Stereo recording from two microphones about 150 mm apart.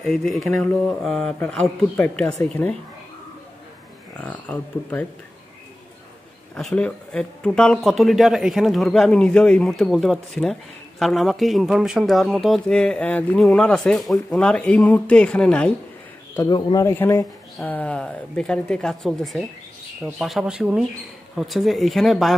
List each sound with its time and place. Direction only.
0.0 s speech: centre (ahead or behind)
4.2 s speech: 10° left (ahead or behind)
6.5 s speech: 5° left (ahead or behind)
16.4 s speech: 25° left (ahead or behind)
17.6 s speech: 10° left (ahead or behind)